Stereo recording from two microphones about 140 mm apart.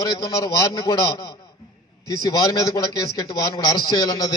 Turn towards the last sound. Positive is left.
turn(degrees=30)  # may be behind; listen again after turning